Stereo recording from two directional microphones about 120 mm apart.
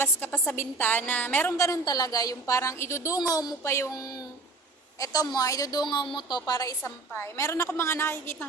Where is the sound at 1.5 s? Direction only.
25° left (ahead or behind).